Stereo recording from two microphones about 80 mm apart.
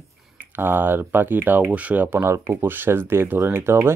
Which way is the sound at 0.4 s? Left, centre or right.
Right.